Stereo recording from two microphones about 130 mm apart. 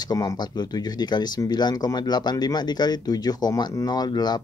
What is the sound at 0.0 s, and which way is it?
Speech, 30° left (ahead or behind).